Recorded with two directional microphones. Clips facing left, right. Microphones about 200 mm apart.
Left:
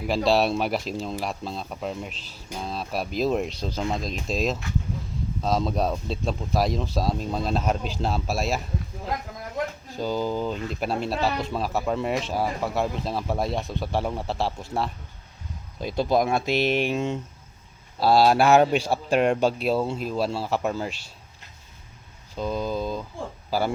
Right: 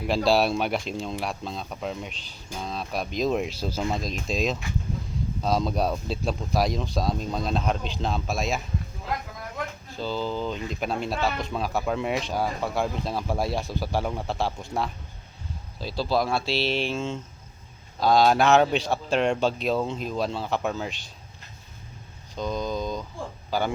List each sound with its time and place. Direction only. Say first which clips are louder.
0.1 s speech: even; centre (ahead or behind)
9.9 s speech: left 2 dB; 15° left (ahead or behind)
16.0 s speech: left 3 dB; 20° left (ahead or behind)
22.4 s a man's voice: left 1 dB; 5° left (ahead or behind)